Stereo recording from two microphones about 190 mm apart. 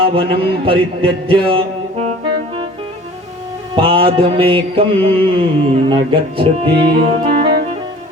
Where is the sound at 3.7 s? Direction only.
30° right (ahead or behind).